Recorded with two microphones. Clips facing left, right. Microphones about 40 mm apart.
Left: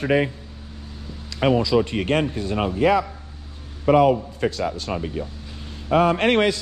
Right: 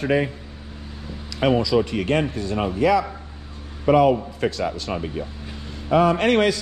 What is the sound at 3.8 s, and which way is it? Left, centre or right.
Speech, left.